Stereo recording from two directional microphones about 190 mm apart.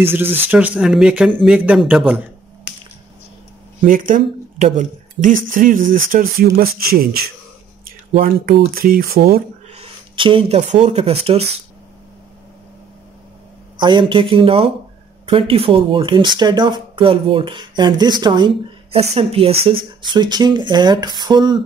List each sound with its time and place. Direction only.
0.0 s speech: 10° right (ahead or behind)
3.8 s speech: 45° right (ahead or behind)
9.8 s speech: 25° right (ahead or behind)
13.7 s speech: 25° right (ahead or behind)